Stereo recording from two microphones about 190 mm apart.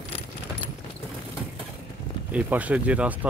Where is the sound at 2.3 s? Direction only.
10° right (ahead or behind).